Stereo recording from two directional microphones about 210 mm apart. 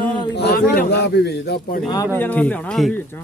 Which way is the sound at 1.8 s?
20° left (ahead or behind).